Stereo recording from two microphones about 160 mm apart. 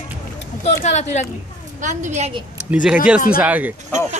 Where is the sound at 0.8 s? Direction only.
45° left (ahead or behind).